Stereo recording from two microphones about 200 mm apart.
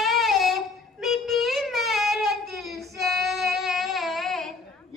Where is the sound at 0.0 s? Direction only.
Centre (ahead or behind).